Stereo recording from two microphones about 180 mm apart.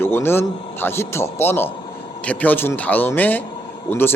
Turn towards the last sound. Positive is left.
turn(degrees=10)  # may be behind; listen again after turning